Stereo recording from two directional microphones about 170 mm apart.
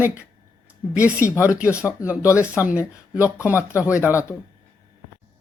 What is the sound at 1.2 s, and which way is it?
Speech, 10° right (ahead or behind).